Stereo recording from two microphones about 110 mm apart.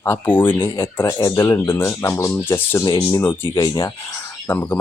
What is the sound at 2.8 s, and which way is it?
Speech, 35° left (ahead or behind).